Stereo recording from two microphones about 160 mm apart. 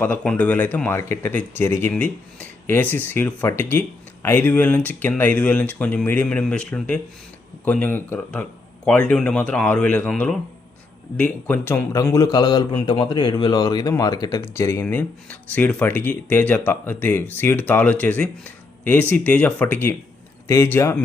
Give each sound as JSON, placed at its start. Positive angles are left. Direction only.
{"t": 0.0, "sound": "a man's voice", "side_deg": 10}